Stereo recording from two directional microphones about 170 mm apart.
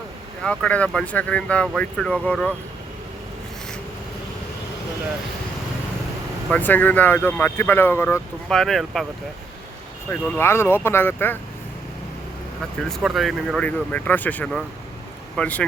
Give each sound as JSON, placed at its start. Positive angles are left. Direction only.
{"t": 0.4, "sound": "speech", "side_deg": 5}
{"t": 6.5, "sound": "speech", "side_deg": 10}
{"t": 8.4, "sound": "speech", "side_deg": 0}
{"t": 10.1, "sound": "speech", "side_deg": 10}
{"t": 12.9, "sound": "speech", "side_deg": 0}